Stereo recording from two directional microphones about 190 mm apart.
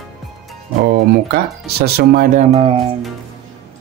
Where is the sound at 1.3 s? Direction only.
55° right (ahead or behind).